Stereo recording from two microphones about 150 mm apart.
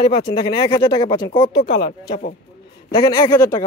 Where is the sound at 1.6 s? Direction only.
80° left.